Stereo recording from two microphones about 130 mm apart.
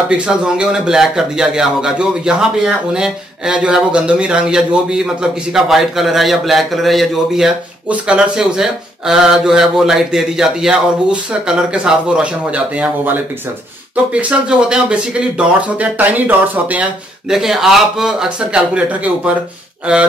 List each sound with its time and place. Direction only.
0.1 s speech: 10° right (ahead or behind)
14.1 s speech: 5° right (ahead or behind)